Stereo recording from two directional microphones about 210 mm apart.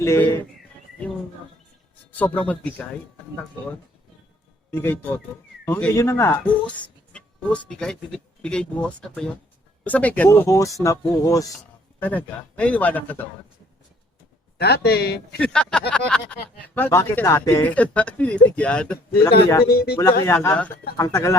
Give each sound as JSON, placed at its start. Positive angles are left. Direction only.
{"t": 0.0, "sound": "a man's voice", "side_deg": 10}
{"t": 2.1, "sound": "a man's voice", "side_deg": 10}
{"t": 4.7, "sound": "a man's voice", "side_deg": 10}
{"t": 14.6, "sound": "speech", "side_deg": 50}
{"t": 15.4, "sound": "a man's voice", "side_deg": 5}
{"t": 19.6, "sound": "speech", "side_deg": 45}
{"t": 20.0, "sound": "a man's voice", "side_deg": 15}